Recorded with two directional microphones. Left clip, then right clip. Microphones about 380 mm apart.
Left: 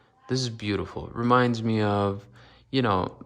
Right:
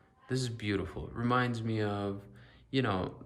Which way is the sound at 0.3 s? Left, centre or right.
Centre.